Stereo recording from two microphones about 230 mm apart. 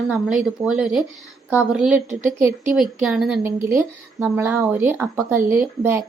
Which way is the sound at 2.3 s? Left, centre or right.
Right.